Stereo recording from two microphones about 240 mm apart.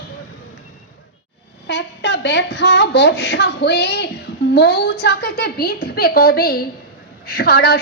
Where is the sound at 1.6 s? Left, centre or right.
Left.